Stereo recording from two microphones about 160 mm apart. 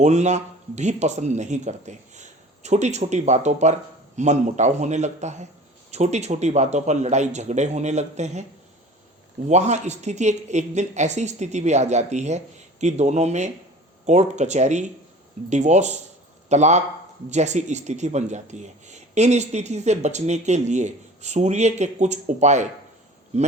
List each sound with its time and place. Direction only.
0.0 s speech: 45° right (ahead or behind)
9.5 s speech: 45° right (ahead or behind)